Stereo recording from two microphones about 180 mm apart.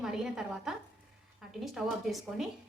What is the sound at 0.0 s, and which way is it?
A woman's voice, 5° right (ahead or behind).